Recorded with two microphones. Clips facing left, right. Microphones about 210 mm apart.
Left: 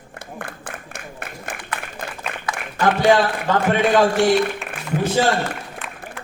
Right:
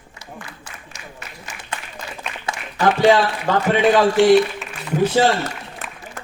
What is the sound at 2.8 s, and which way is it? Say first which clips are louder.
A man's voice: right 1 dB; 50° left (ahead or behind).